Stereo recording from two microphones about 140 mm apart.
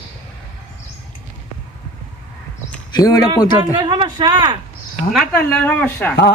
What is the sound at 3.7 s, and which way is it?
Speech, 35° right (ahead or behind).